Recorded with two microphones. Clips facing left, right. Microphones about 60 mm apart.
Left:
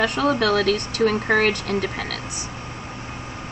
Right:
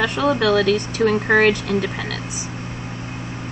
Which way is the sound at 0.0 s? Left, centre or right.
Left.